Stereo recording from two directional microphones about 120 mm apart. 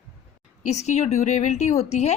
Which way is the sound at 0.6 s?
70° left (ahead or behind).